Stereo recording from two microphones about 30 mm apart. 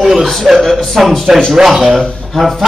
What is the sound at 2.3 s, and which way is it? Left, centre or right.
Speech, centre.